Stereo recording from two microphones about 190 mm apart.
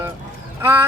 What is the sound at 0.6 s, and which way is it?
Speech, 10° right (ahead or behind).